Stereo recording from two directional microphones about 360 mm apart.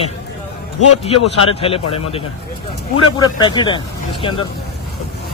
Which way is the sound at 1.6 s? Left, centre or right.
Centre.